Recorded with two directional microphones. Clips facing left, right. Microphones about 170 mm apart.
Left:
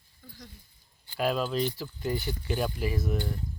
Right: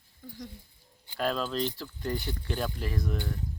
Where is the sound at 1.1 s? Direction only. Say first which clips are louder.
Left 2 dB; 5° left (ahead or behind).